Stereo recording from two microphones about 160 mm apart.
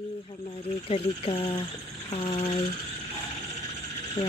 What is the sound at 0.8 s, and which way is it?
Speech, 35° left (ahead or behind).